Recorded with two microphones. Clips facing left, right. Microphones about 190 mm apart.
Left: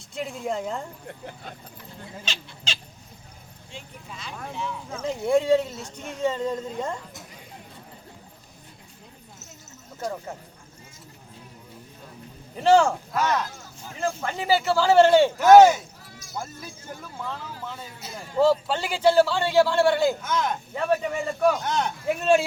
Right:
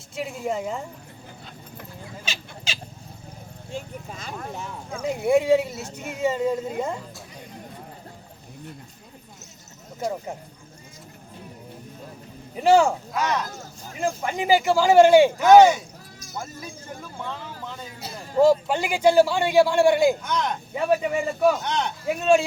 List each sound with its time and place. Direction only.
0.2 s a man's voice: 5° right (ahead or behind)
2.3 s speech: 10° right (ahead or behind)
3.7 s speech: 45° right (ahead or behind)
4.9 s speech: 10° right (ahead or behind)
10.0 s speech: 15° right (ahead or behind)
12.6 s a man's voice: 10° right (ahead or behind)
14.0 s speech: 15° right (ahead or behind)
15.4 s a man's voice: 5° left (ahead or behind)
17.0 s speech: 5° left (ahead or behind)
18.3 s speech: 15° right (ahead or behind)
20.2 s a man's voice: centre (ahead or behind)
20.7 s a man's voice: 10° right (ahead or behind)